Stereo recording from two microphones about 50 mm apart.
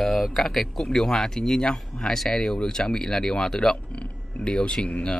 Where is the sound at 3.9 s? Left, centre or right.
Left.